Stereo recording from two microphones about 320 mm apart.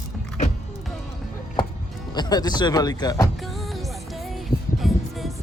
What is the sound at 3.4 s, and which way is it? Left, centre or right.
Music, centre.